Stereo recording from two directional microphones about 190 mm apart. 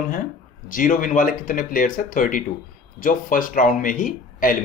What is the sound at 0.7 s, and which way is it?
A man's voice, 45° left (ahead or behind).